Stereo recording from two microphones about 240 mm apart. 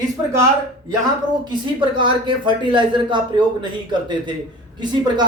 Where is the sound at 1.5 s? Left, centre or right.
Centre.